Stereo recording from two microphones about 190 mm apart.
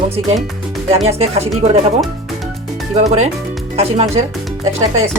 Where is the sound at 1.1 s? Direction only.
35° right (ahead or behind).